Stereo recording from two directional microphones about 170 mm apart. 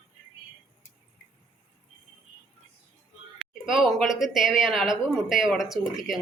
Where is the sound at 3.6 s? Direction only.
Centre (ahead or behind).